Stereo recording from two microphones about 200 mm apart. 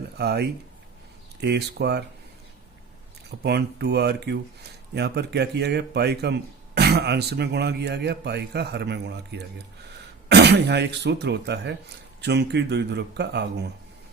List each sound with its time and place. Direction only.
0.2 s speech: 55° right (ahead or behind)
3.4 s speech: 55° right (ahead or behind)